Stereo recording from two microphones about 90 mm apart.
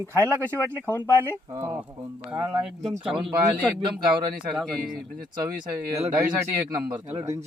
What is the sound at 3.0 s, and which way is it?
Speech, 75° right (ahead or behind).